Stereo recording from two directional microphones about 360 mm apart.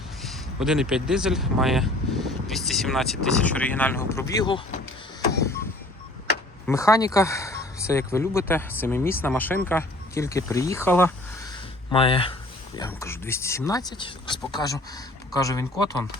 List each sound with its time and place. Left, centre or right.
0.2 s speech: centre
6.7 s speech: centre